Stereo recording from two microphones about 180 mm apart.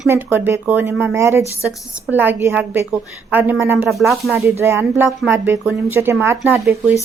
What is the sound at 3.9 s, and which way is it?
Speech, centre (ahead or behind).